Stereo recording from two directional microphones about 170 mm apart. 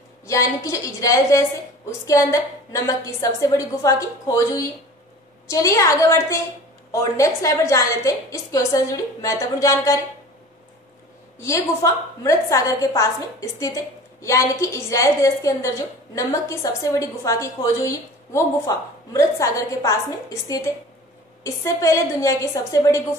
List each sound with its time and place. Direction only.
0.3 s a woman's voice: 20° left (ahead or behind)
11.3 s a woman's voice: 20° left (ahead or behind)